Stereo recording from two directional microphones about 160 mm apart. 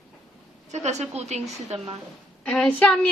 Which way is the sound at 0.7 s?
45° right (ahead or behind).